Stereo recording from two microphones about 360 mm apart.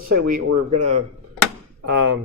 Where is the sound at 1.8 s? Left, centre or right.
Right.